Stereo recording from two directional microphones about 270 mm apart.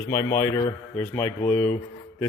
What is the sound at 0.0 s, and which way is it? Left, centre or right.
A man's voice, centre.